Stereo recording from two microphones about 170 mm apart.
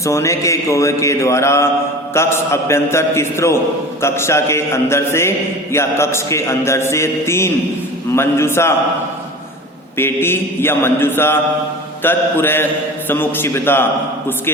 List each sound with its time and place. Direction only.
0.0 s speech: 15° left (ahead or behind)
10.0 s speech: 15° left (ahead or behind)